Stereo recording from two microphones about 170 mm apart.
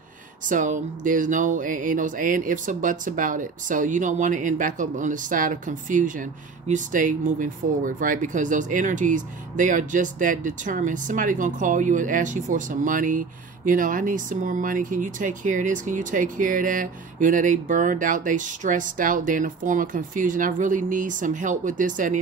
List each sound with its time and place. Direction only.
0.5 s speech: 50° right (ahead or behind)